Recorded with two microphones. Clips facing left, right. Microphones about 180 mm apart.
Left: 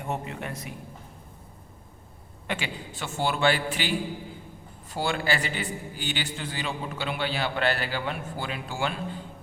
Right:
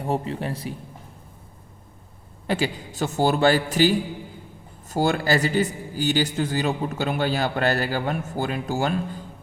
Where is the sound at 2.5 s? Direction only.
40° right (ahead or behind).